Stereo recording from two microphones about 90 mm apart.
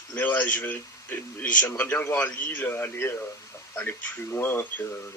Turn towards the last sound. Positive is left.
turn(degrees=25)  # may be behind; listen again after turning